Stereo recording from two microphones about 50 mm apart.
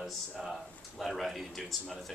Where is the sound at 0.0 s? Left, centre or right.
Centre.